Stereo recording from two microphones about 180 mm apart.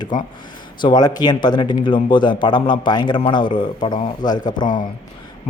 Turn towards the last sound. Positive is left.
turn(degrees=25)  # may be behind; listen again after turning